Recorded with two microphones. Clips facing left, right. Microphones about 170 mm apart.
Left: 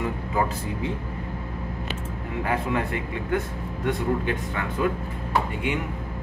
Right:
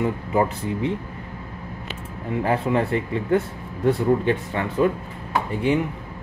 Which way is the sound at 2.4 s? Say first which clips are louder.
Right 4 dB; 30° right (ahead or behind).